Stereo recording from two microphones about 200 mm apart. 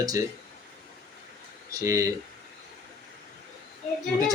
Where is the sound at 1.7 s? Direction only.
15° right (ahead or behind).